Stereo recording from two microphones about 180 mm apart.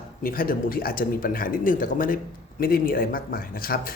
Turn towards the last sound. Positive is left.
turn(degrees=55)  # may be behind; listen again after turning